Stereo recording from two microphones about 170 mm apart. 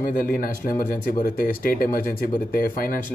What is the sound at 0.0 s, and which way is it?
Speech, 55° left (ahead or behind).